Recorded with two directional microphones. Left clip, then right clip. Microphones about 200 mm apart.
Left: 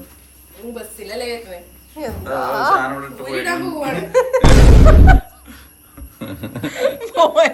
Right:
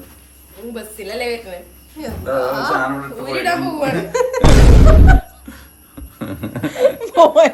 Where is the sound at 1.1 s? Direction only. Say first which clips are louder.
Right 3 dB; 25° right (ahead or behind).